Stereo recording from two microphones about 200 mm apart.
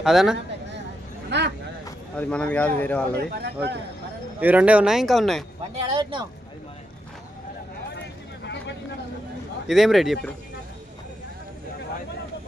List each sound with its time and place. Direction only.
0.0 s speech: centre (ahead or behind)
1.3 s vehicle: 60° right (ahead or behind)
2.1 s speech: 5° left (ahead or behind)
3.4 s speech: 55° right (ahead or behind)
4.4 s speech: 10° right (ahead or behind)
5.7 s speech: 25° right (ahead or behind)
9.6 s speech: centre (ahead or behind)